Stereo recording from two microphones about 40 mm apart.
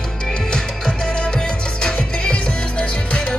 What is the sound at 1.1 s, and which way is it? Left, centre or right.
Music, left.